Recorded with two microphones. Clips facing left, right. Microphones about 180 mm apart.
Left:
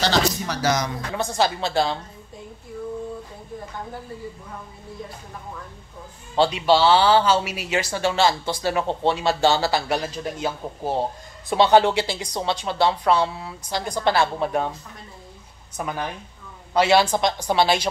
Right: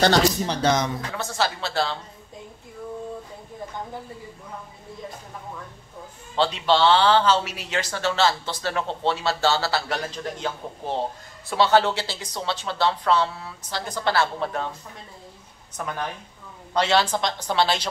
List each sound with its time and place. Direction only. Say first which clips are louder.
0.4 s speech: right 1 dB; 30° right (ahead or behind)
0.8 s speech: left 2 dB; 15° left (ahead or behind)
6.3 s speech: left 3 dB; 10° left (ahead or behind)
15.7 s speech: left 2 dB; 10° left (ahead or behind)